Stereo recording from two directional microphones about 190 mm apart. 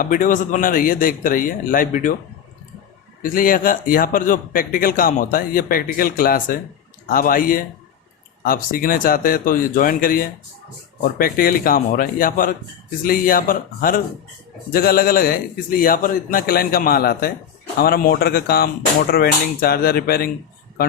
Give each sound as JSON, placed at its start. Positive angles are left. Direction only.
{"t": 0.0, "sound": "a man's voice", "side_deg": 45}
{"t": 3.2, "sound": "a man's voice", "side_deg": 45}